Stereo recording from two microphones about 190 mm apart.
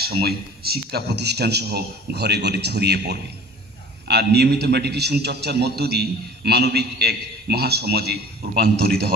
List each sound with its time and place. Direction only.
0.0 s a man's voice: 55° right (ahead or behind)